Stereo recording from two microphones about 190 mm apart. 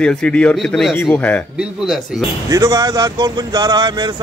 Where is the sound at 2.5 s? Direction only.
20° right (ahead or behind).